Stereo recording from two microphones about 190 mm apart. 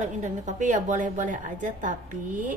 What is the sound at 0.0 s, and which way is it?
A woman's voice, 40° right (ahead or behind).